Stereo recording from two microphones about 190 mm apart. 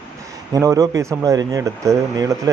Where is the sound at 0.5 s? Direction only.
15° right (ahead or behind).